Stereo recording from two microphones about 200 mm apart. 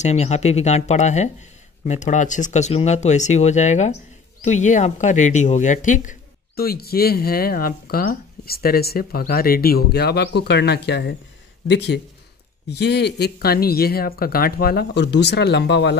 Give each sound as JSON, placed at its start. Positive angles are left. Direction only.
{"t": 0.0, "sound": "speech", "side_deg": 35}